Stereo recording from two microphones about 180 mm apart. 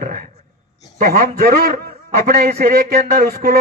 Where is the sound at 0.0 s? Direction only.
55° right (ahead or behind).